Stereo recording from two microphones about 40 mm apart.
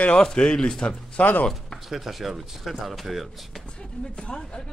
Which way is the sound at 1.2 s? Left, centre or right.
Left.